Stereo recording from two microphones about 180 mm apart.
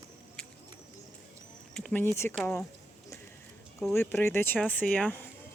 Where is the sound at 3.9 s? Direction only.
15° left (ahead or behind).